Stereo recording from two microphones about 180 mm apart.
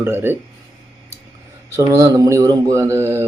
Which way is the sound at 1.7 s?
15° right (ahead or behind).